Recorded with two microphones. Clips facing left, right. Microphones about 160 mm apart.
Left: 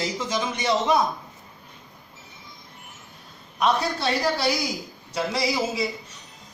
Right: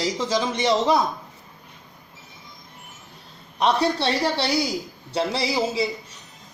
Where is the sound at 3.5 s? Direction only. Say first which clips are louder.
Right 2 dB; 30° right (ahead or behind).